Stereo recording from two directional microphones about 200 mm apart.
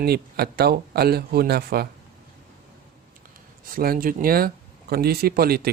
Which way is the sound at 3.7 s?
45° right (ahead or behind).